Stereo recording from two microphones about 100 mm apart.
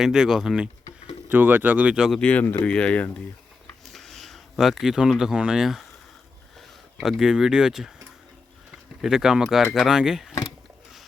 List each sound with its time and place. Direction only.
0.0 s speech: 5° right (ahead or behind)
1.3 s speech: 20° right (ahead or behind)
2.0 s speech: 10° left (ahead or behind)
3.9 s speech: 5° left (ahead or behind)
9.0 s speech: 5° right (ahead or behind)